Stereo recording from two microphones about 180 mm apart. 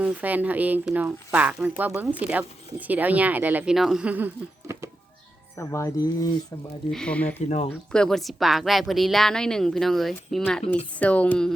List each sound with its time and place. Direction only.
0.0 s speech: 10° right (ahead or behind)
5.5 s speech: 15° left (ahead or behind)
6.9 s speech: 5° left (ahead or behind)
7.4 s speech: 35° left (ahead or behind)
7.7 s a woman's voice: 5° left (ahead or behind)